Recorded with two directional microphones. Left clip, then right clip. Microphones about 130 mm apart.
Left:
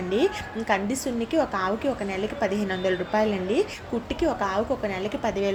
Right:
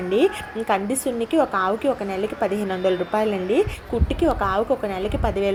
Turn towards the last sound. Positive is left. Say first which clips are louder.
# right 3 dB
turn(degrees=-25)  # may be behind; listen again after turning